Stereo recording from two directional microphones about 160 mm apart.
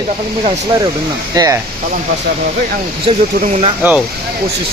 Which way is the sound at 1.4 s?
25° right (ahead or behind).